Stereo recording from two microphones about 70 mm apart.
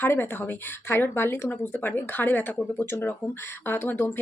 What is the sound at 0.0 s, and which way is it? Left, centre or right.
Speech, left.